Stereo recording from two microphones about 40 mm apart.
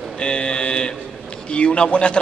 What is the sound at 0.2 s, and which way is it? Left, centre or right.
Mantra, left.